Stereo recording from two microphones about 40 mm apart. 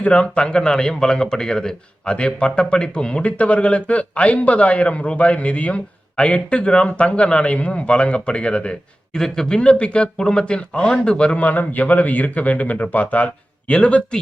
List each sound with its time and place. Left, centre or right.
0.0 s speech: left
2.1 s speech: left
9.6 s speech: left
11.3 s speech: left